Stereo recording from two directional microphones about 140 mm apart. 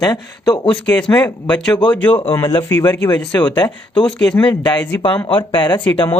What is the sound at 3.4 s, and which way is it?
Speech, 30° left (ahead or behind).